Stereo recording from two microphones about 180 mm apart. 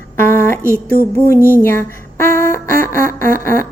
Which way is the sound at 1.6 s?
15° left (ahead or behind).